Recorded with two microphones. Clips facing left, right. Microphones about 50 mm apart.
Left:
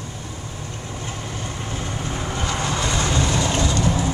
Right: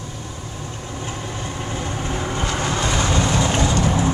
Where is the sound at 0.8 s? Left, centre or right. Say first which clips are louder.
Right 3 dB; centre.